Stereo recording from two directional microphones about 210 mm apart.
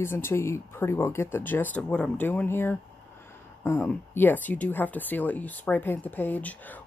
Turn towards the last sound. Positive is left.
turn(degrees=10)  # may be behind; listen again after turning